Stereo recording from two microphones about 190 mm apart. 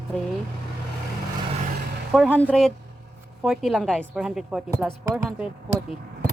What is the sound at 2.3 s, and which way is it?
A woman's voice, 5° left (ahead or behind).